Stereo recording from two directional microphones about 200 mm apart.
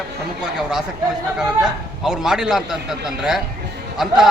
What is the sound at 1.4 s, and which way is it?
A man's voice, 5° right (ahead or behind).